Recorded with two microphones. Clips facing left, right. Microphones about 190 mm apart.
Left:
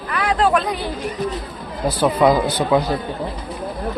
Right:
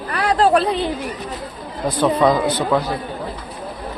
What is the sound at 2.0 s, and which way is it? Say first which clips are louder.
Speech: even; 10° left (ahead or behind).